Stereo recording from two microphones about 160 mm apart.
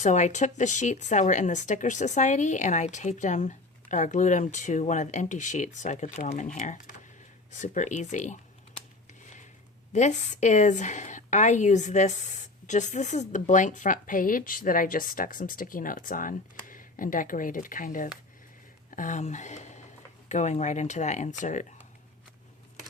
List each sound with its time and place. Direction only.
0.0 s speech: 50° left (ahead or behind)
9.9 s a woman's voice: 50° left (ahead or behind)